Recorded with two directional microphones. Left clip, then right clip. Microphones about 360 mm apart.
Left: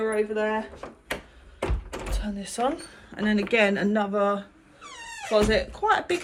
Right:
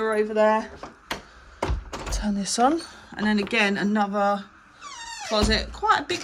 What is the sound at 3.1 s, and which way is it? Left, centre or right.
Speech, centre.